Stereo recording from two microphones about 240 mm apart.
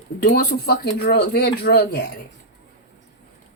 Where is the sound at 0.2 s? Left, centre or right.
Left.